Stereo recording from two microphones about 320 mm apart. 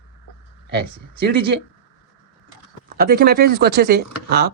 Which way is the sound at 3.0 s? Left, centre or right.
Right.